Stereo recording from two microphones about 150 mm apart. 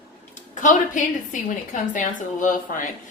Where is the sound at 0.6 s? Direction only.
60° left (ahead or behind).